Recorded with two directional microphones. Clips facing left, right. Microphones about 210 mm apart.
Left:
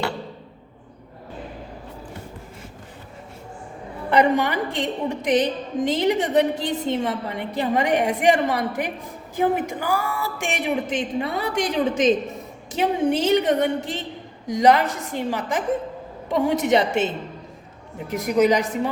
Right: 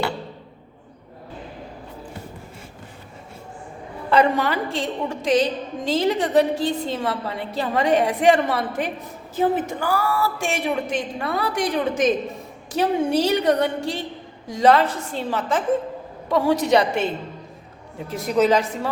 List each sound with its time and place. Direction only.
4.1 s a woman's voice: 20° left (ahead or behind)
18.1 s a woman's voice: 15° left (ahead or behind)